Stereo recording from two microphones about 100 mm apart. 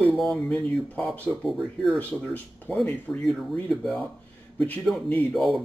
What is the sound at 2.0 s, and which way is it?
Speech, 15° left (ahead or behind).